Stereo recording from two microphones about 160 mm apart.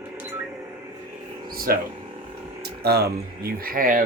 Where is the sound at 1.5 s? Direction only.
65° right (ahead or behind).